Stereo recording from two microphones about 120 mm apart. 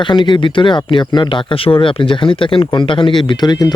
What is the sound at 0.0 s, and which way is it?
Speech, 40° left (ahead or behind).